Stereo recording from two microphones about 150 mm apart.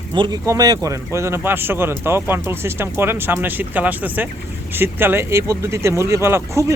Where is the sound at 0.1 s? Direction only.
30° right (ahead or behind).